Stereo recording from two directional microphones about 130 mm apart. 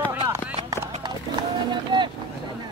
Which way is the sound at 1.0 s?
35° right (ahead or behind).